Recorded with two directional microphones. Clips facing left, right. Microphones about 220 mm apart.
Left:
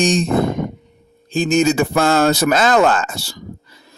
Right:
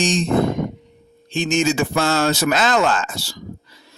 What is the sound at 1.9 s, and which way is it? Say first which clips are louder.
Speech: left 4 dB; 55° left (ahead or behind).